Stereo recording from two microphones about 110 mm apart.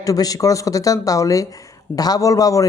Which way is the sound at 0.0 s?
35° left (ahead or behind).